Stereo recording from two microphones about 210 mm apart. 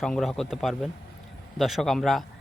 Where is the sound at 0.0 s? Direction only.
Centre (ahead or behind).